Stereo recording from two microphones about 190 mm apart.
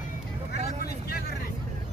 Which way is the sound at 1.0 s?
55° left (ahead or behind).